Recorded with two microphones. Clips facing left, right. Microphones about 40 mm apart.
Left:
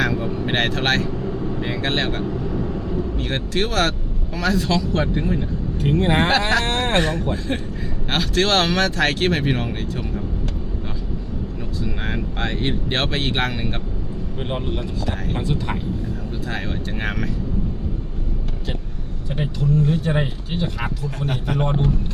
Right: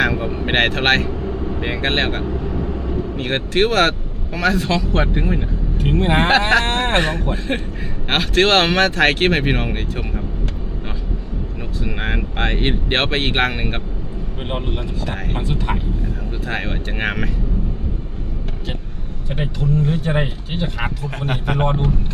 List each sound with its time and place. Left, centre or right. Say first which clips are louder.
0.0 s speech: right 3 dB; right
1.1 s vehicle: right 1 dB; centre
1.6 s speech: right 4 dB; right
2.2 s vehicle: right 1 dB; centre
3.2 s speech: right 8 dB; right
5.8 s speech: right 1 dB; centre
12.0 s speech: right 5 dB; right
15.4 s speech: right 2 dB; centre
16.5 s speech: right 4 dB; right
19.4 s speech: even; centre
21.2 s speech: right 3 dB; right